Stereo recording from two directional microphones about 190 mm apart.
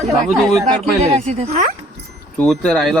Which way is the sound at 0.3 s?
Centre (ahead or behind).